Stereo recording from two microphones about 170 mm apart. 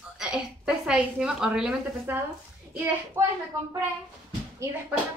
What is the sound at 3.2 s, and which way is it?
Speech, 15° right (ahead or behind).